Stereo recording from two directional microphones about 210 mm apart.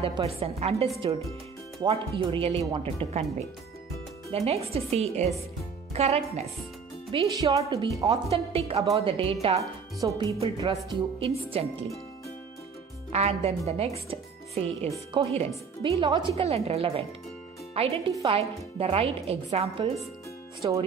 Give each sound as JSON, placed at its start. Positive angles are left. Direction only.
{"t": 0.0, "sound": "speech", "side_deg": -25}
{"t": 4.3, "sound": "a woman's voice", "side_deg": -30}
{"t": 8.0, "sound": "speech", "side_deg": -30}
{"t": 9.6, "sound": "a woman's voice", "side_deg": -15}
{"t": 13.1, "sound": "speech", "side_deg": -30}